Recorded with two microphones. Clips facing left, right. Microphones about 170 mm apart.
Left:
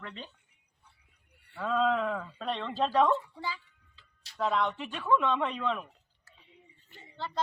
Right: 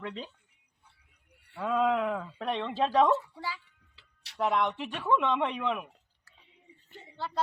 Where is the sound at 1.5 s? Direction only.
10° right (ahead or behind).